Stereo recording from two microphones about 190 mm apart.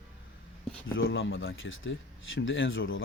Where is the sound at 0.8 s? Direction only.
90° left.